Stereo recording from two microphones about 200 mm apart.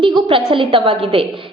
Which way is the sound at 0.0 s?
25° right (ahead or behind).